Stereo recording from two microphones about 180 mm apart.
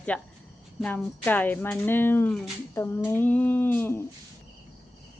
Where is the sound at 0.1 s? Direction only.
5° left (ahead or behind).